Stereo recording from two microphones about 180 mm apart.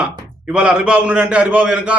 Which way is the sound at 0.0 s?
5° right (ahead or behind).